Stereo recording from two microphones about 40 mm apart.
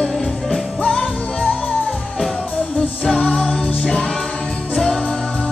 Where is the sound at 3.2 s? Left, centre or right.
Left.